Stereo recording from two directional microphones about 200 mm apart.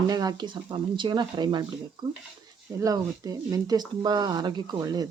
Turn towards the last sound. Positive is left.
turn(degrees=-20)  # may be behind; listen again after turning